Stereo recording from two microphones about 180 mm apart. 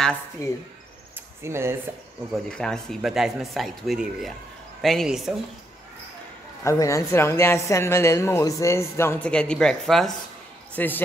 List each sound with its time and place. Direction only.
0.4 s speech: 20° left (ahead or behind)
1.4 s speech: 15° right (ahead or behind)
2.3 s speech: 5° left (ahead or behind)
6.6 s speech: 15° left (ahead or behind)